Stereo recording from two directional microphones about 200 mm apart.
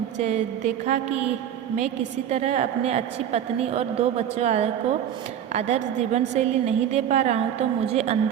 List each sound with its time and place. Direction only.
0.2 s a woman's voice: 35° right (ahead or behind)
2.3 s a woman's voice: 30° right (ahead or behind)